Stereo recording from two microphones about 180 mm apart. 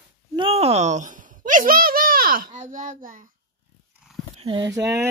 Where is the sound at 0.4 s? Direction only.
35° right (ahead or behind).